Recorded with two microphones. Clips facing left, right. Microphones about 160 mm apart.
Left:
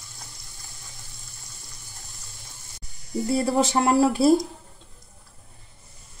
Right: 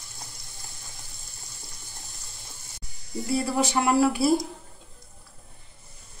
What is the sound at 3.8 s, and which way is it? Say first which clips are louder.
Speech: left 2 dB; 40° left (ahead or behind).